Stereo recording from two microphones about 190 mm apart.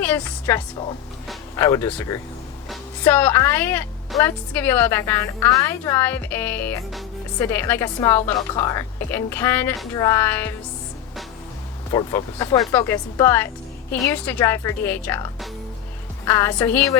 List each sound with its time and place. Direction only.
0.0 s a woman's voice: 10° left (ahead or behind)
11.9 s a woman's voice: 20° left (ahead or behind)